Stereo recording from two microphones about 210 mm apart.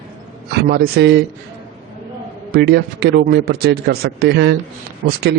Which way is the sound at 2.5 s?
50° right (ahead or behind).